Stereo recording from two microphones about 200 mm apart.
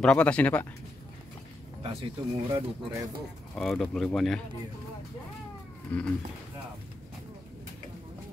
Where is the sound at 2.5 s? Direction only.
20° right (ahead or behind).